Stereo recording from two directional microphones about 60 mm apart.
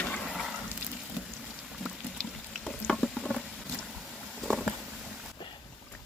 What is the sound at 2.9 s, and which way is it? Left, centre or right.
Rodents, centre.